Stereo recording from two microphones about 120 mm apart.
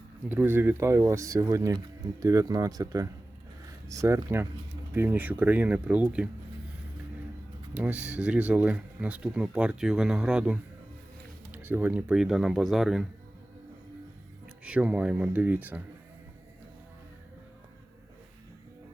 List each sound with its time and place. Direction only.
0.3 s speech: 20° right (ahead or behind)
7.7 s speech: 10° right (ahead or behind)
14.6 s speech: 10° right (ahead or behind)